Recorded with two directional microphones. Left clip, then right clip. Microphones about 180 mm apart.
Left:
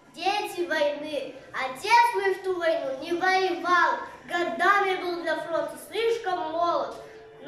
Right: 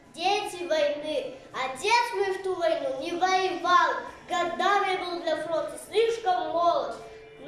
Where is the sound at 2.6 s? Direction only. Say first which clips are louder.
Right 1 dB; 15° right (ahead or behind).